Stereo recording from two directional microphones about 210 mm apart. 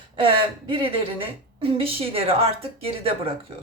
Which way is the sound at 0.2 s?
25° right (ahead or behind).